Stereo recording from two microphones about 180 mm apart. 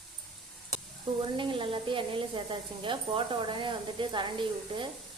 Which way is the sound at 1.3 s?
30° right (ahead or behind).